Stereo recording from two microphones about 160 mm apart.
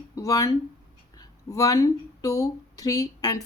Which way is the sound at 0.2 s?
20° left (ahead or behind).